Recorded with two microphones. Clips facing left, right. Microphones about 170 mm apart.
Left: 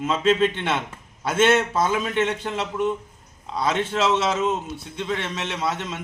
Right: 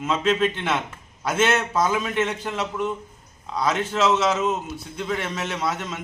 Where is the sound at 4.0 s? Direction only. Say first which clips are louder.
Right 2 dB; 30° left (ahead or behind).